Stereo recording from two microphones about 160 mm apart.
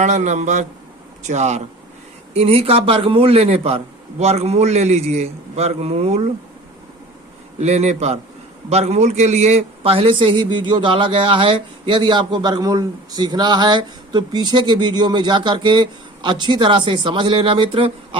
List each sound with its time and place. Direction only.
0.0 s a man's voice: 45° right (ahead or behind)
7.6 s a man's voice: 45° right (ahead or behind)